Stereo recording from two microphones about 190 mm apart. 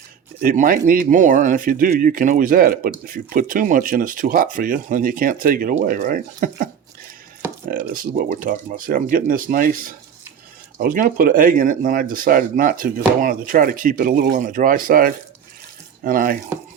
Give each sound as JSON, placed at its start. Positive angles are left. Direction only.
{"t": 0.4, "sound": "speech", "side_deg": -45}
{"t": 7.7, "sound": "speech", "side_deg": -45}